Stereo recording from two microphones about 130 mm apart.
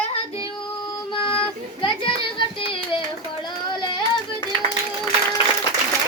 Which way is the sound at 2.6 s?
45° left (ahead or behind).